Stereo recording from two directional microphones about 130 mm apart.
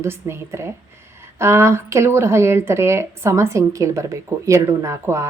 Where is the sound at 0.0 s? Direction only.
20° right (ahead or behind).